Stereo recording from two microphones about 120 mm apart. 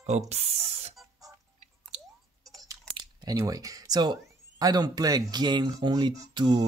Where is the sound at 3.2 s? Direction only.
25° right (ahead or behind).